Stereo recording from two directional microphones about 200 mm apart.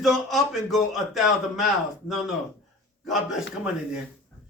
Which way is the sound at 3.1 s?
Centre (ahead or behind).